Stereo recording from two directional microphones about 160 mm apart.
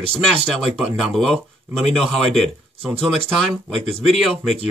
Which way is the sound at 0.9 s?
Centre (ahead or behind).